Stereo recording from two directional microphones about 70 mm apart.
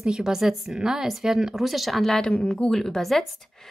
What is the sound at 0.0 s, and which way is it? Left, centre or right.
A woman's voice, centre.